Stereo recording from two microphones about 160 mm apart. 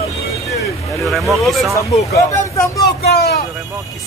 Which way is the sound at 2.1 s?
20° left (ahead or behind).